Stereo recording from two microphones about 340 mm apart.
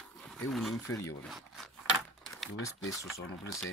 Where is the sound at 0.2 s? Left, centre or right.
Centre.